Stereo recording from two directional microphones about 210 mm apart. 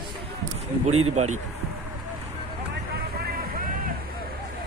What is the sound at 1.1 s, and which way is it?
Speech, 35° right (ahead or behind).